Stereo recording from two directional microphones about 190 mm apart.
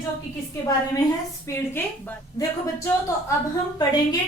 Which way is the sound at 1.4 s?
15° left (ahead or behind).